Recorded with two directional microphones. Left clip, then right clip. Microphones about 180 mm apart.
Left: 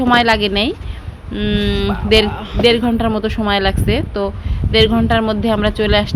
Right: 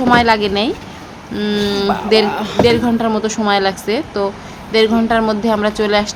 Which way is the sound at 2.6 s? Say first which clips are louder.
Left 3 dB; 30° left (ahead or behind).